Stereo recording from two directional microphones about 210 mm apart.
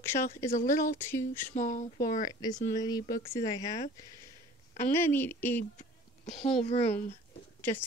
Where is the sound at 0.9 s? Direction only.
10° left (ahead or behind).